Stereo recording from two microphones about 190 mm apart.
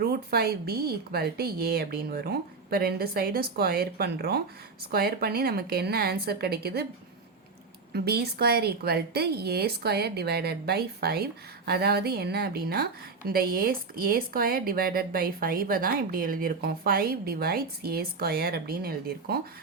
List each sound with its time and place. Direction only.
0.0 s a woman's voice: 55° right (ahead or behind)
7.9 s a woman's voice: 55° right (ahead or behind)